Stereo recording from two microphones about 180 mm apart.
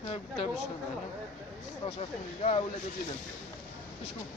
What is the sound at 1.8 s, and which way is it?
Speech, 35° left (ahead or behind).